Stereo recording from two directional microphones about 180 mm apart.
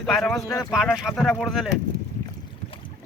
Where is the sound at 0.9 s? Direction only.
Centre (ahead or behind).